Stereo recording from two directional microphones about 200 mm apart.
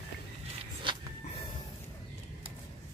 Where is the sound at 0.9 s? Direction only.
25° right (ahead or behind).